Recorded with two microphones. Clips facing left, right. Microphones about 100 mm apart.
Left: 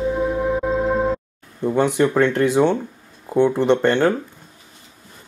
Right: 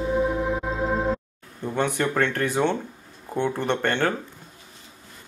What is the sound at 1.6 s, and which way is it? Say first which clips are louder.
Speech: left 7 dB; 15° left (ahead or behind).